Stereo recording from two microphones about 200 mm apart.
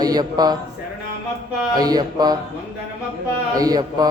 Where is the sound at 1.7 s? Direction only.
20° right (ahead or behind).